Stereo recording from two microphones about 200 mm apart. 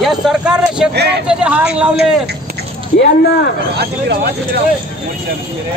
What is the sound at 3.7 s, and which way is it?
Speech, 55° right (ahead or behind).